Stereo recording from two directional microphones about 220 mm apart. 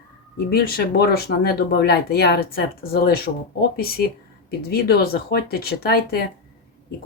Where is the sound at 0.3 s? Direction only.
45° left (ahead or behind).